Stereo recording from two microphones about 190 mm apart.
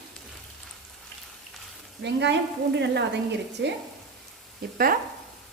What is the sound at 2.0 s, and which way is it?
Speech, 65° right (ahead or behind).